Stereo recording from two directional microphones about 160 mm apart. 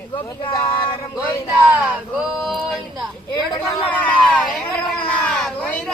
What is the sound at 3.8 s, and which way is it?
Speech, 10° left (ahead or behind).